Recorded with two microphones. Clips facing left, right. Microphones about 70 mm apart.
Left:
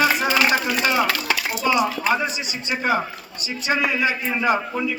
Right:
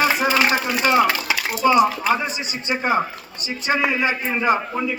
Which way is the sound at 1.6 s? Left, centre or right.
Right.